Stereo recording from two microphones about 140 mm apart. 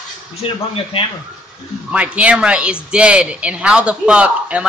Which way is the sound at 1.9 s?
10° right (ahead or behind).